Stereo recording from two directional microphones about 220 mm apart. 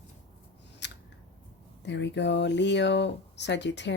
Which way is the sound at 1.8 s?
55° left (ahead or behind).